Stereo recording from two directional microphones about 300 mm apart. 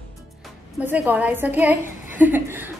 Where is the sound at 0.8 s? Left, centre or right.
Centre.